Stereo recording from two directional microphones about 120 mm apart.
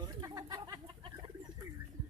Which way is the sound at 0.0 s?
35° right (ahead or behind).